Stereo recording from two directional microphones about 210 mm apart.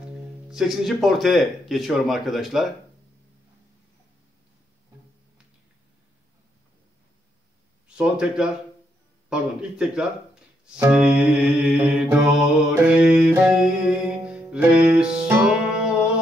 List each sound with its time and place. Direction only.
0.5 s speech: centre (ahead or behind)
7.9 s speech: 5° right (ahead or behind)
10.6 s music: 5° right (ahead or behind)